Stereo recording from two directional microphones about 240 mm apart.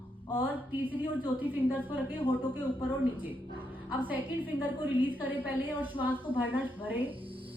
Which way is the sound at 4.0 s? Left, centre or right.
Centre.